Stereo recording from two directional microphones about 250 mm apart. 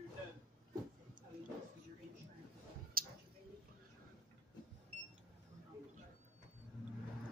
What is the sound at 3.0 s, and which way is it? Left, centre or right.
Tick-tock, right.